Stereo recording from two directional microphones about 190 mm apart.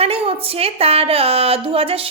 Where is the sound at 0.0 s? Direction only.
30° right (ahead or behind).